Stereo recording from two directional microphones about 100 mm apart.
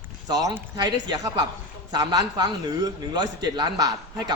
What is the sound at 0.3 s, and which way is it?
A man's voice, 40° right (ahead or behind).